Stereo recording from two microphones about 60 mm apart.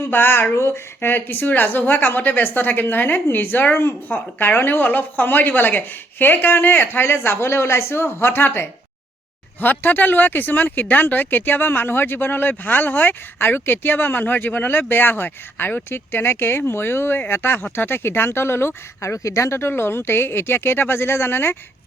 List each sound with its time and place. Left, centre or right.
0.0 s speech: left
0.5 s a sound: left
1.0 s speech: left